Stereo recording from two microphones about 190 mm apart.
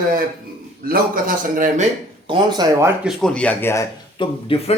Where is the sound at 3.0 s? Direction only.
5° left (ahead or behind).